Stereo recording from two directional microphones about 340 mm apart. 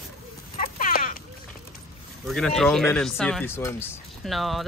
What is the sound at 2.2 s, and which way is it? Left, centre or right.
Speech, centre.